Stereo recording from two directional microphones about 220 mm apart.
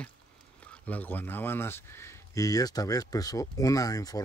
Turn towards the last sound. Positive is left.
turn(degrees=15)  # may be behind; listen again after turning